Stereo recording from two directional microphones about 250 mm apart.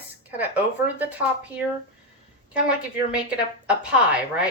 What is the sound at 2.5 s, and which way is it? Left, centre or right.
A woman's voice, centre.